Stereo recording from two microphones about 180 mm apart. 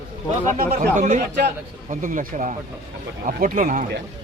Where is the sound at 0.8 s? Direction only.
45° right (ahead or behind).